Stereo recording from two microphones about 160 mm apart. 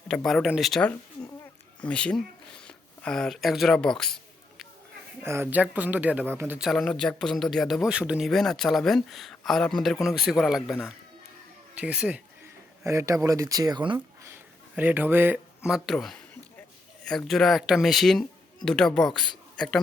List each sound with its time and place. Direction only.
0.1 s speech: 5° left (ahead or behind)
5.2 s speech: 15° right (ahead or behind)
12.8 s speech: 20° right (ahead or behind)
14.8 s speech: 10° right (ahead or behind)